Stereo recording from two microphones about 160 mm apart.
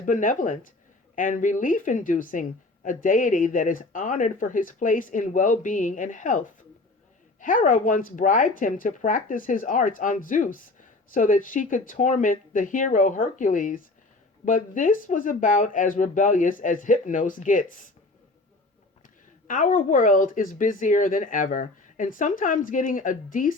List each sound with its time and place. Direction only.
0.0 s a woman's voice: 55° left (ahead or behind)
19.5 s a woman's voice: 55° left (ahead or behind)